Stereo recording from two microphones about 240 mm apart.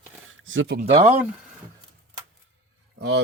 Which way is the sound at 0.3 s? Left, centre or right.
Right.